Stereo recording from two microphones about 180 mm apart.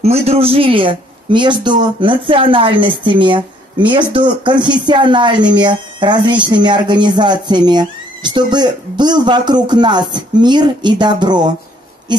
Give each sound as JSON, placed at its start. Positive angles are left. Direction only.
{"t": 0.0, "sound": "a man's voice", "side_deg": -35}